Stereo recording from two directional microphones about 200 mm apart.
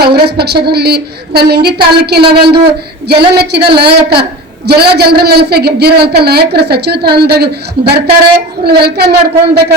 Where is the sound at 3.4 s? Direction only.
55° right (ahead or behind).